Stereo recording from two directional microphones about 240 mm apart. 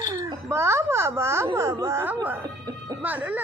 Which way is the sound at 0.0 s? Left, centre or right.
Centre.